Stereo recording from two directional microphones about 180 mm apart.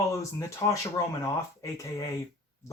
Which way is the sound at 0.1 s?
15° left (ahead or behind).